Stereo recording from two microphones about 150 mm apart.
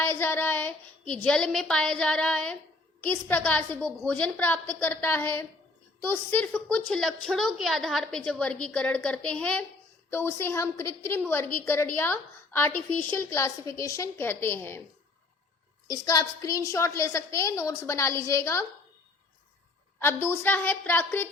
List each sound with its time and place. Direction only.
0.0 s a woman's voice: 15° left (ahead or behind)
15.9 s a woman's voice: 25° left (ahead or behind)
20.0 s a woman's voice: 15° left (ahead or behind)